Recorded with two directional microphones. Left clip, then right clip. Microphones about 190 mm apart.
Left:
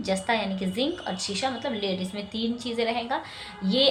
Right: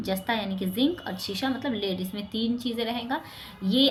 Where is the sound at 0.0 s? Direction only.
25° right (ahead or behind).